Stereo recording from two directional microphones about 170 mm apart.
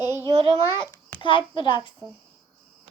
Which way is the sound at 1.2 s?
30° left (ahead or behind).